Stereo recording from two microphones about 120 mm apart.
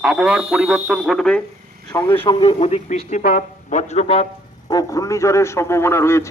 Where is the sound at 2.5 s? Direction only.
60° left (ahead or behind).